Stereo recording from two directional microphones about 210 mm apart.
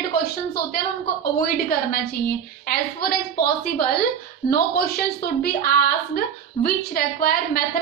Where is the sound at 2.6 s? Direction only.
45° left (ahead or behind).